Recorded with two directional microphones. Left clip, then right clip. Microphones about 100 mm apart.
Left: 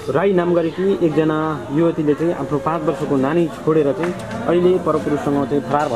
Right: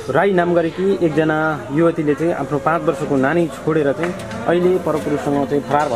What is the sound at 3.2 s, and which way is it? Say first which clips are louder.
Speech: right 1 dB; 35° right (ahead or behind).